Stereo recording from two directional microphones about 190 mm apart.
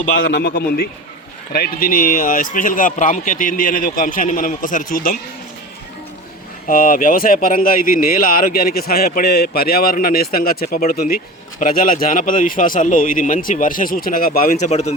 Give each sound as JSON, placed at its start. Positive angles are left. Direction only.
{"t": 0.3, "sound": "a man's voice", "side_deg": 60}
{"t": 6.7, "sound": "speech", "side_deg": 45}